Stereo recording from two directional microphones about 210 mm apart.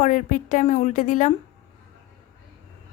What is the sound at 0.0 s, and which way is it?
A woman's voice, 40° left (ahead or behind).